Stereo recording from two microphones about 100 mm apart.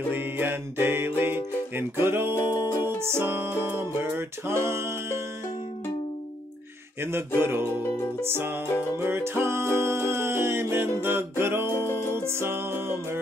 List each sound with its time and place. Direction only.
0.1 s music: 20° right (ahead or behind)
2.3 s music: 40° left (ahead or behind)
3.0 s music: 25° right (ahead or behind)
7.0 s music: 25° right (ahead or behind)
11.7 s music: 25° left (ahead or behind)
12.2 s music: 25° right (ahead or behind)